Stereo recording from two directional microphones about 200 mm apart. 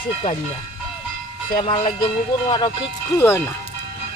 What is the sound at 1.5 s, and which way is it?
Speech, 25° left (ahead or behind).